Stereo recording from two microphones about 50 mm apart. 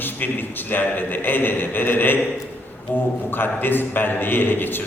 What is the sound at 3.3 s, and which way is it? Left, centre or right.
A man's voice, left.